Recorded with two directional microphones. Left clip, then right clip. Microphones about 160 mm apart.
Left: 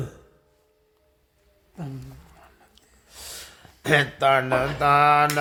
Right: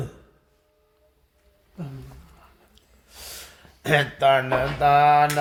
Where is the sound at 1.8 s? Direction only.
60° left (ahead or behind).